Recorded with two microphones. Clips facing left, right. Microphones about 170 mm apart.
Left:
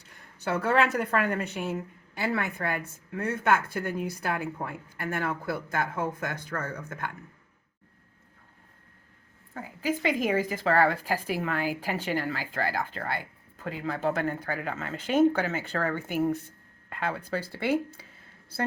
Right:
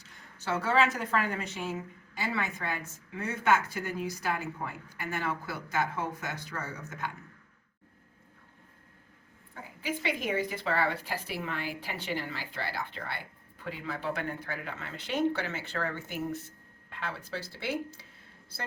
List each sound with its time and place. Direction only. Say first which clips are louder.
0.1 s a woman's voice: left 3 dB; 60° left (ahead or behind)
9.8 s a woman's voice: left 6 dB; 45° left (ahead or behind)